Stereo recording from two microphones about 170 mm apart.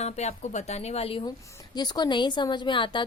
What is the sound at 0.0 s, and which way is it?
Speech, 40° left (ahead or behind).